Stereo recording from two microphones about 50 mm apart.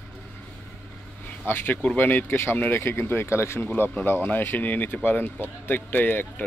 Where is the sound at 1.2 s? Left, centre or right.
Left.